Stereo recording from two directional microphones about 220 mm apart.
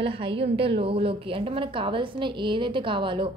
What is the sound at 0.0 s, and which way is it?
A woman's voice, 25° right (ahead or behind).